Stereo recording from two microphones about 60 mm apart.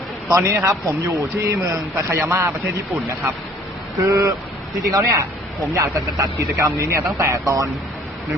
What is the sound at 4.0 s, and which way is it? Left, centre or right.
Speech, right.